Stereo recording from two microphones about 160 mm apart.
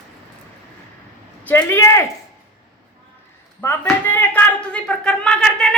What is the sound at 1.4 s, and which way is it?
Speech, 15° left (ahead or behind).